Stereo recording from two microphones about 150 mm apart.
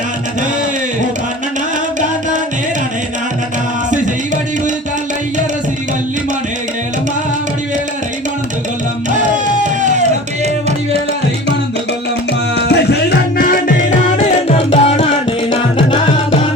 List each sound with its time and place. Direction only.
12.6 s music: 90° left
14.2 s music: 40° left (ahead or behind)